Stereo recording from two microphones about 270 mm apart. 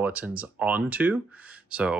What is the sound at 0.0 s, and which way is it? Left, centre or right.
Speech, centre.